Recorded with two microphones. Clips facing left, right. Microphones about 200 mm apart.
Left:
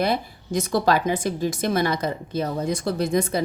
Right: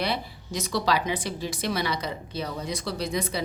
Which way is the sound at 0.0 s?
50° left (ahead or behind).